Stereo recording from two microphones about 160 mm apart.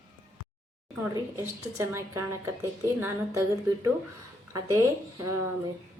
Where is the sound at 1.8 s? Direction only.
15° right (ahead or behind).